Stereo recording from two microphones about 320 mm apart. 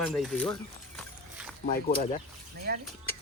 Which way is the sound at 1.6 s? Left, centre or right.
Left.